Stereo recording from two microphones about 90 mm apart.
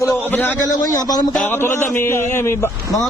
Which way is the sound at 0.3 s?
20° left (ahead or behind).